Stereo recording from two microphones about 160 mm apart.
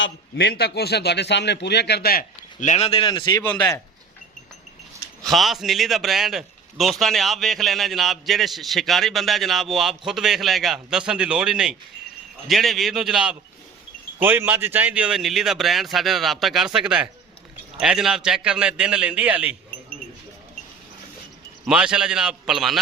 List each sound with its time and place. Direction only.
0.3 s speech: 85° left; by 3.4 s 25° left (ahead or behind)
3.4 s speech: 10° left (ahead or behind)
5.2 s a man's voice: centre (ahead or behind)
21.7 s a man's voice: 5° right (ahead or behind)